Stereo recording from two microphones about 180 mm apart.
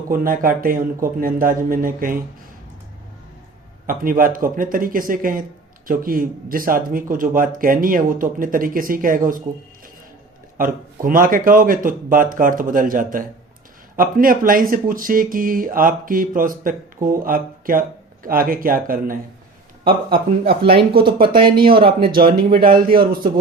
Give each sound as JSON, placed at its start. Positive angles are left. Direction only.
{"t": 0.1, "sound": "speech", "side_deg": -50}
{"t": 3.8, "sound": "speech", "side_deg": -50}
{"t": 11.0, "sound": "speech", "side_deg": -50}
{"t": 19.8, "sound": "speech", "side_deg": -30}
{"t": 21.6, "sound": "a man's voice", "side_deg": -55}